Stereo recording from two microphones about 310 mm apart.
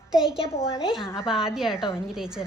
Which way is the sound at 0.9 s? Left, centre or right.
Centre.